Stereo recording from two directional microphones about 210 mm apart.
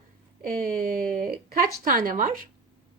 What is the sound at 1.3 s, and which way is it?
Speech, 45° right (ahead or behind).